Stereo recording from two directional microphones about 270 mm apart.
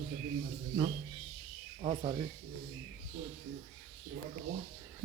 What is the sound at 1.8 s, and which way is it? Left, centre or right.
Speech, right.